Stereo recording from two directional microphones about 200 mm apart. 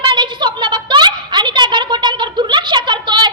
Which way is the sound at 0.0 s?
25° right (ahead or behind).